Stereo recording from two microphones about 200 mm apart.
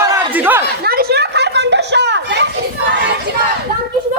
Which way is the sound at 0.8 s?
50° right (ahead or behind).